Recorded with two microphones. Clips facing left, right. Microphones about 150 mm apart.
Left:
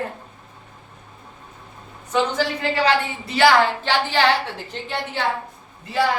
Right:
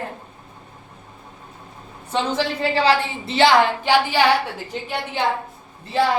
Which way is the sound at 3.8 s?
10° right (ahead or behind).